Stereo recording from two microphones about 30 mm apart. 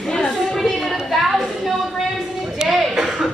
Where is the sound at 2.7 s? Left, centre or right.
Centre.